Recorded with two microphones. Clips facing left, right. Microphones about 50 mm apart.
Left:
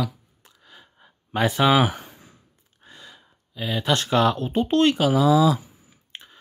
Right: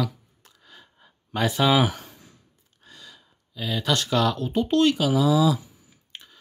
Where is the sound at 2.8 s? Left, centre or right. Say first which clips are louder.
Left 2 dB; left.